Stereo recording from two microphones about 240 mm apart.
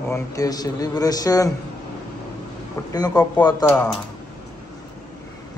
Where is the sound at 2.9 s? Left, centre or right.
Centre.